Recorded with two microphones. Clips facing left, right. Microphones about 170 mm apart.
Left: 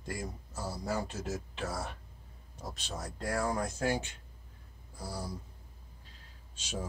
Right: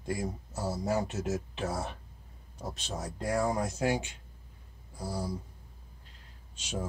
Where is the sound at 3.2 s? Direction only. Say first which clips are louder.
Right 3 dB; 20° right (ahead or behind).